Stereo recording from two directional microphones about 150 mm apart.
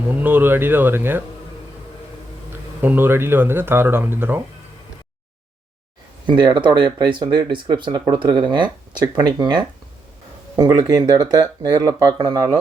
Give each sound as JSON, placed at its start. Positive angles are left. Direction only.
{"t": 0.2, "sound": "speech", "side_deg": -10}
{"t": 2.5, "sound": "speech", "side_deg": -15}
{"t": 6.2, "sound": "speech", "side_deg": -30}